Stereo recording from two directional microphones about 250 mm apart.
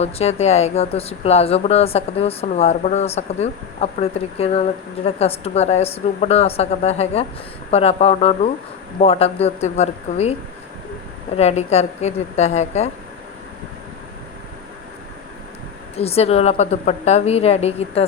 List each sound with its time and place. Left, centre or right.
0.0 s speech: left
11.3 s speech: left
16.0 s speech: left